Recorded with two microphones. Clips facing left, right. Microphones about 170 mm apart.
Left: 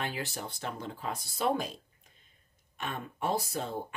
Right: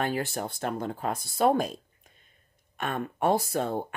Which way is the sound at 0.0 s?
50° right (ahead or behind).